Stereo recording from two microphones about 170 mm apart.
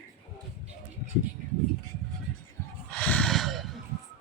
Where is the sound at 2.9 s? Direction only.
10° left (ahead or behind).